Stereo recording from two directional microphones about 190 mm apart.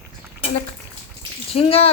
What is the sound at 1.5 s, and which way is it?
Speech, 30° left (ahead or behind).